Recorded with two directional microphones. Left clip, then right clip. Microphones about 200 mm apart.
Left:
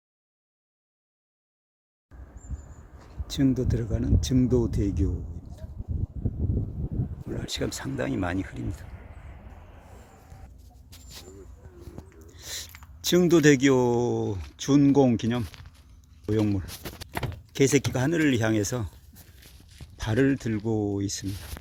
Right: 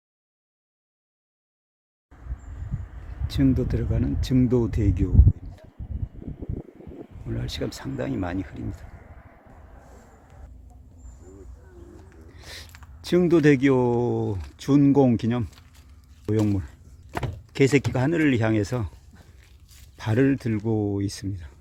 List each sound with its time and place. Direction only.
3.2 s speech: 5° right (ahead or behind)
7.3 s speech: 5° right (ahead or behind)
8.9 s a sound: 25° right (ahead or behind)
12.3 s a sound: 5° right (ahead or behind)
13.0 s speech: 5° right (ahead or behind)
20.0 s speech: 15° right (ahead or behind)